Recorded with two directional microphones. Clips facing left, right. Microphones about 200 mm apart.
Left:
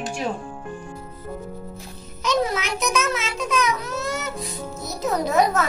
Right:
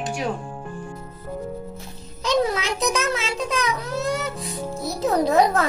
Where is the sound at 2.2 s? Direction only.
30° right (ahead or behind).